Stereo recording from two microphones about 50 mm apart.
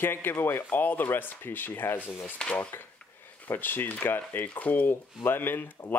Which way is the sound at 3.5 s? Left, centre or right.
Left.